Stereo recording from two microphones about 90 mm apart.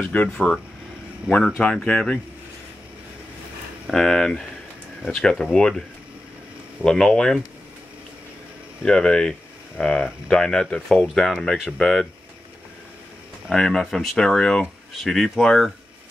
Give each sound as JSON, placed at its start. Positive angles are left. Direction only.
{"t": 0.0, "sound": "speech", "side_deg": 15}
{"t": 1.6, "sound": "speech", "side_deg": 5}
{"t": 3.9, "sound": "speech", "side_deg": 5}
{"t": 6.8, "sound": "speech", "side_deg": 5}
{"t": 8.8, "sound": "speech", "side_deg": 10}
{"t": 13.5, "sound": "speech", "side_deg": 5}